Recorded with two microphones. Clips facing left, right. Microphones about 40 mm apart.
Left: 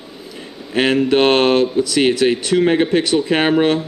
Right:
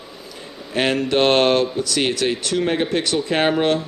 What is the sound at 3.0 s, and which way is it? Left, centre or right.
Speech, left.